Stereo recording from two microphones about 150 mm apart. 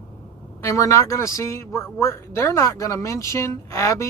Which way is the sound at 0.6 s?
20° left (ahead or behind).